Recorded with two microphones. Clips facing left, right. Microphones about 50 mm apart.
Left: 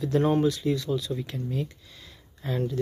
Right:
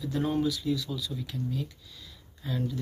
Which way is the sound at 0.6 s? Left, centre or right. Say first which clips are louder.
Left 5 dB; left.